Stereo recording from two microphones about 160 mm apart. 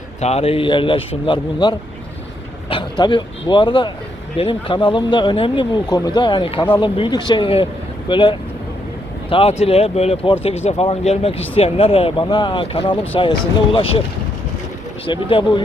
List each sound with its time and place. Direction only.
0.2 s speech: 40° left (ahead or behind)
3.0 s speech: 30° left (ahead or behind)
15.0 s speech: 30° left (ahead or behind)